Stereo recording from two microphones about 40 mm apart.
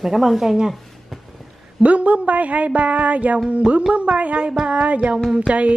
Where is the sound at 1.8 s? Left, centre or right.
Right.